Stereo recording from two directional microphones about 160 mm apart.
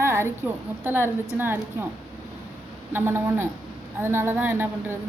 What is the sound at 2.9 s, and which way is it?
A woman's voice, 15° right (ahead or behind).